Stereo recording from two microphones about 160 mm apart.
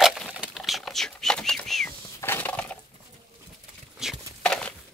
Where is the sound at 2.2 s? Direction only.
15° left (ahead or behind).